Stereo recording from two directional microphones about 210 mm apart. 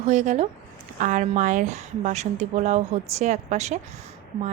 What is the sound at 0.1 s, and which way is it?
A woman's voice, 35° right (ahead or behind).